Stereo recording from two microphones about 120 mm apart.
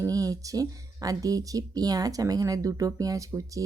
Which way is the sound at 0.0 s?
30° right (ahead or behind).